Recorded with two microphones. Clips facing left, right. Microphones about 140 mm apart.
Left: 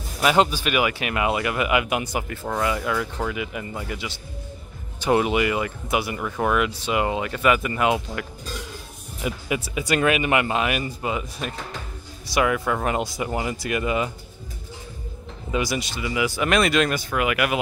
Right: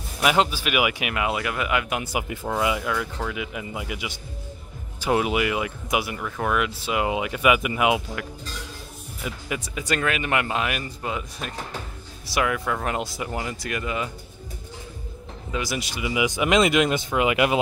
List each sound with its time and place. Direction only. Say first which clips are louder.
0.2 s speech: left 2 dB; 5° right (ahead or behind)
1.1 s speech: left 3 dB; centre (ahead or behind)
2.1 s speech: even; 10° right (ahead or behind)
6.1 s speech: left 3 dB; 5° left (ahead or behind); by 8.0 s 10° right (ahead or behind)
9.2 s speech: left 5 dB; 5° left (ahead or behind)
15.5 s speech: left 4 dB; centre (ahead or behind)
15.9 s speech: even; 15° right (ahead or behind)